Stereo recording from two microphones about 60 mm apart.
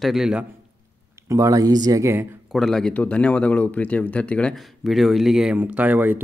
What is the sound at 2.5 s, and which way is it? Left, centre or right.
Speech, centre.